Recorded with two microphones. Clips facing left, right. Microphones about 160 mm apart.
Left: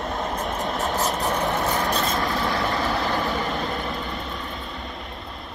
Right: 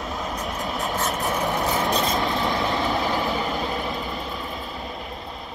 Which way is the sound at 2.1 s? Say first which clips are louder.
Right 1 dB; 20° right (ahead or behind).